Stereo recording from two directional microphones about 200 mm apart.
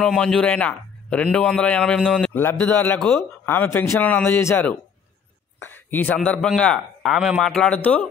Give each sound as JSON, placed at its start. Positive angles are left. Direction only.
{"t": 0.0, "sound": "a man's voice", "side_deg": 5}